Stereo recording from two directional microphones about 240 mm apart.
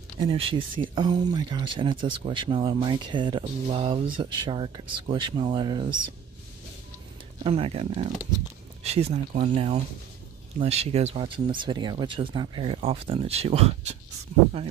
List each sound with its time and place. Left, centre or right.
0.2 s speech: right
7.4 s speech: right